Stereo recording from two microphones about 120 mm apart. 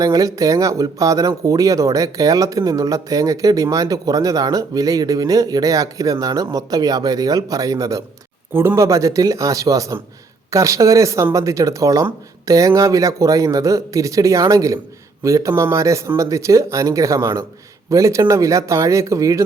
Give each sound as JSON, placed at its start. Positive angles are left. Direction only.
{"t": 0.0, "sound": "speech", "side_deg": -30}